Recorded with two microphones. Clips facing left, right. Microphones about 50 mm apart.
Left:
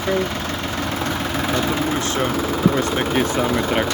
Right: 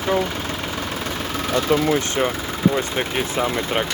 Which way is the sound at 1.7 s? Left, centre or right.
Right.